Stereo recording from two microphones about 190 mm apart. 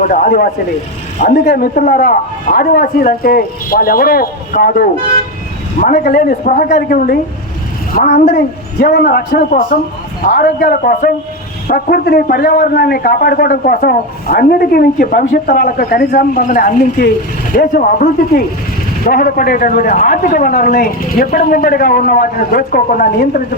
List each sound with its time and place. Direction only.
0.0 s a man's voice: 40° left (ahead or behind)